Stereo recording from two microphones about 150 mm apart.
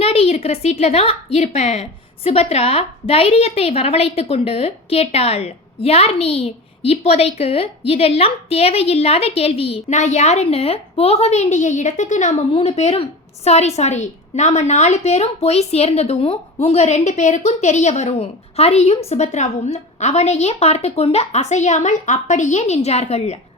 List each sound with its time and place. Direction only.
0.0 s a woman's voice: 40° left (ahead or behind)